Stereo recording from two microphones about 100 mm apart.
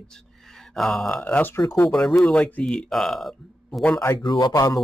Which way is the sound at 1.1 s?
15° left (ahead or behind).